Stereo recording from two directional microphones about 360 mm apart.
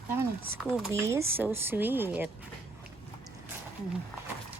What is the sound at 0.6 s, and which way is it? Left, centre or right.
Speech, centre.